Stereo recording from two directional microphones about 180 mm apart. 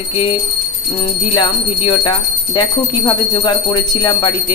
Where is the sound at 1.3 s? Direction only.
25° left (ahead or behind).